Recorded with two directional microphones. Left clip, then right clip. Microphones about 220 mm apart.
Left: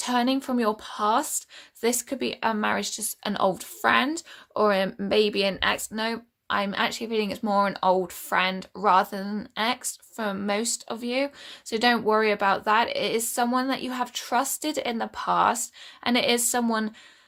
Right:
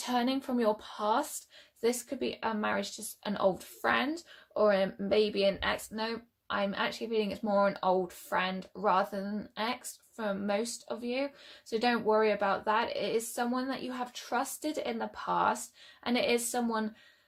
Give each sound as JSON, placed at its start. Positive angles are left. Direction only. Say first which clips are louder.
{"t": 0.0, "sound": "speech", "louder": "left 7 dB", "side_deg": 30}